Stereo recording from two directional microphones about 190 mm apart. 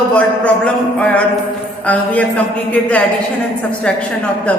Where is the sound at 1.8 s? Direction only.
5° left (ahead or behind).